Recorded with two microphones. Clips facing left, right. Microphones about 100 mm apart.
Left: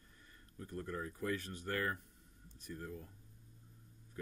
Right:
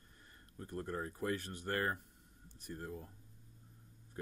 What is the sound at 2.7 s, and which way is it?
Speech, 35° right (ahead or behind).